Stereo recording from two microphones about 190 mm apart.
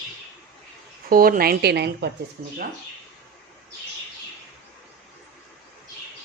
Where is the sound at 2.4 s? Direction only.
45° right (ahead or behind).